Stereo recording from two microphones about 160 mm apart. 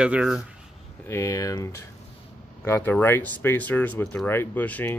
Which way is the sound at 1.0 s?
20° left (ahead or behind).